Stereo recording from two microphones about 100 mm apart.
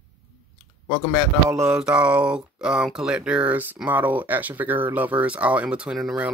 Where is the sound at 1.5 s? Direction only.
25° right (ahead or behind).